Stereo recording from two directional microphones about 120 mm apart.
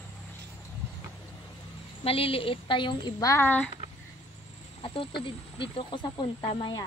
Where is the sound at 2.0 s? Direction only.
50° left (ahead or behind).